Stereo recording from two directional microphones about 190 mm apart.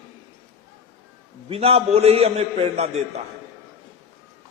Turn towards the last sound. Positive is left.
turn(degrees=-35)  # may be behind; listen again after turning